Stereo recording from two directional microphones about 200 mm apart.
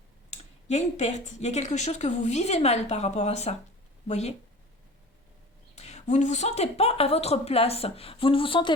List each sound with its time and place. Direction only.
0.3 s speech: 35° left (ahead or behind)
5.7 s speech: 35° left (ahead or behind)